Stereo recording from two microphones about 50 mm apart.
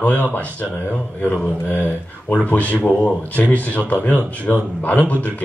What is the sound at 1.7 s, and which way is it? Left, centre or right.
Speech, left.